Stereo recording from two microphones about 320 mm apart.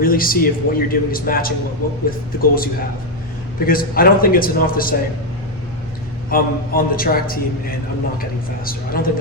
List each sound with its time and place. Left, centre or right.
0.0 s a man's voice: left
3.7 s a man's voice: left
6.3 s a man's voice: left